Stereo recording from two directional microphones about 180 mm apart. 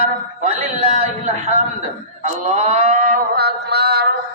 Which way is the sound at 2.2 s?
40° right (ahead or behind).